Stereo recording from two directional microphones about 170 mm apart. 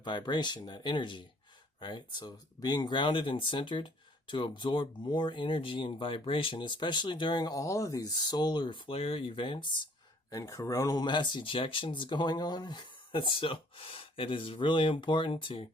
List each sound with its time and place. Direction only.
0.0 s speech: 25° left (ahead or behind)